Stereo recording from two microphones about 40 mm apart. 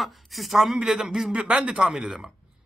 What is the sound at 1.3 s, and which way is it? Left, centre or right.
Speech, right.